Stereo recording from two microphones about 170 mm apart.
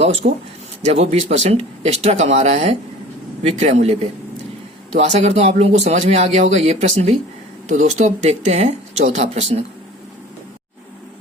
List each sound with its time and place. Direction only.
0.0 s speech: 35° right (ahead or behind)